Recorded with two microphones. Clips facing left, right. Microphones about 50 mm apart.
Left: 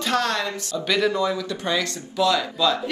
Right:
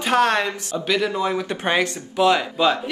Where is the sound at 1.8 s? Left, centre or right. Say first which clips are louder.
Right 4 dB; right.